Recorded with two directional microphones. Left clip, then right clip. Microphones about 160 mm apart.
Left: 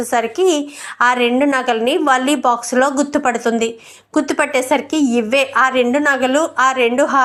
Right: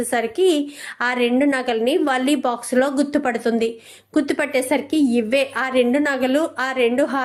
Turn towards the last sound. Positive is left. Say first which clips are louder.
# left 5 dB
turn(degrees=-20)  # may be behind; listen again after turning